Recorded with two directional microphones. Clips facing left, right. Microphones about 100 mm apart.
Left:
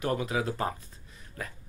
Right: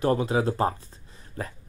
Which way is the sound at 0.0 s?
30° right (ahead or behind).